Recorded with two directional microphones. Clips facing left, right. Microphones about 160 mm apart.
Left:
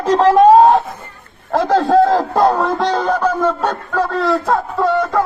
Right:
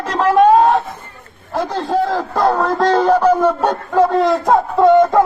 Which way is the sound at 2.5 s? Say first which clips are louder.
Right 2 dB; centre (ahead or behind).